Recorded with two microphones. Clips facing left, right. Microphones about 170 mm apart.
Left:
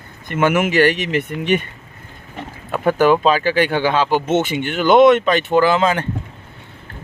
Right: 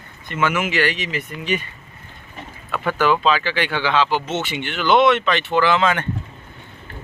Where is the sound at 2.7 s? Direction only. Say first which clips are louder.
Left 5 dB; 45° left (ahead or behind).